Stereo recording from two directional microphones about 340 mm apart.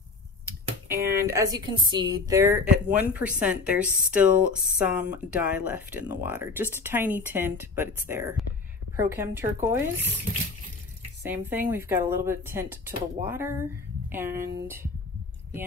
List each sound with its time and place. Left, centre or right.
0.8 s a woman's voice: centre
11.2 s speech: centre